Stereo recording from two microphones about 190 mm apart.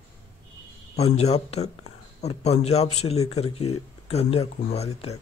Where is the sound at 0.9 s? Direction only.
35° left (ahead or behind).